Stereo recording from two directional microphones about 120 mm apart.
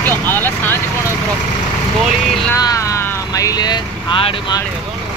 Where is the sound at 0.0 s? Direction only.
20° left (ahead or behind).